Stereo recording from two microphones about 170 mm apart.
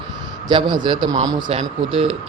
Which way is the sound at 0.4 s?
25° right (ahead or behind).